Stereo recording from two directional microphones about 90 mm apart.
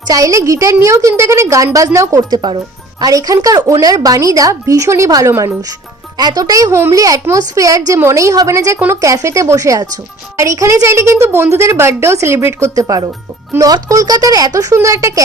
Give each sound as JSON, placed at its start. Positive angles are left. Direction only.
{"t": 0.1, "sound": "a woman's voice", "side_deg": -40}
{"t": 2.3, "sound": "a woman's voice", "side_deg": -50}
{"t": 6.1, "sound": "a woman's voice", "side_deg": -50}